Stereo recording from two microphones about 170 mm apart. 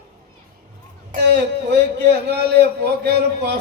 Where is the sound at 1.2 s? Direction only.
85° right.